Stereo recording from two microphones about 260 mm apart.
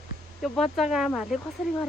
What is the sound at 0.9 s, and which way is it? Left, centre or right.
Speech, centre.